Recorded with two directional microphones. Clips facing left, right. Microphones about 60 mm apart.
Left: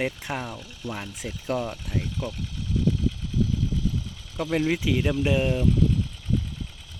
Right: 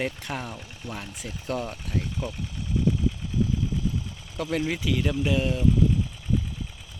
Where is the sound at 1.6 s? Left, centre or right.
Centre.